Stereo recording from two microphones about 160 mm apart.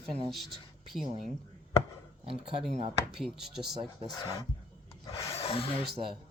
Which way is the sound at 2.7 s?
45° right (ahead or behind).